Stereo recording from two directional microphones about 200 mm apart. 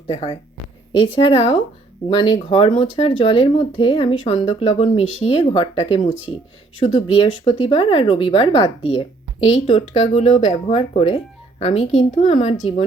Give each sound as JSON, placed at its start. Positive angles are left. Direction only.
{"t": 0.1, "sound": "speech", "side_deg": 30}